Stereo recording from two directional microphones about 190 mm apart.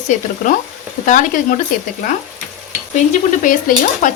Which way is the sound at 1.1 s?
45° left (ahead or behind).